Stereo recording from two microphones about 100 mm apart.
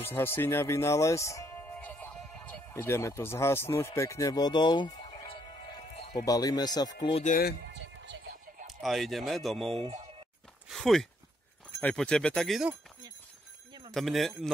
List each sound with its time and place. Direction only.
0.0 s speech: 20° left (ahead or behind)
1.6 s music: 15° left (ahead or behind)
2.7 s speech: 25° left (ahead or behind); by 5.3 s 50° left (ahead or behind)
6.2 s speech: 40° left (ahead or behind)
8.8 s speech: centre (ahead or behind)
9.8 s speech: 90° right
10.7 s speech: centre (ahead or behind)
13.9 s speech: centre (ahead or behind)